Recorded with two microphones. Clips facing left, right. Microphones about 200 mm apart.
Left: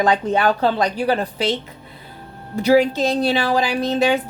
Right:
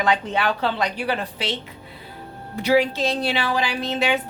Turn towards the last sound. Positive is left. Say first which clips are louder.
# left 5 dB
turn(degrees=40)  # may be behind; listen again after turning